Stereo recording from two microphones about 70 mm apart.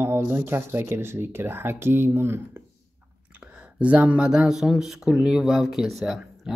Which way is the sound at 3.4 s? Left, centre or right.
Centre.